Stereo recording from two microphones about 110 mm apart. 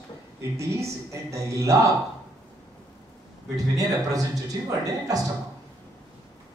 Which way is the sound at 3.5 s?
35° right (ahead or behind).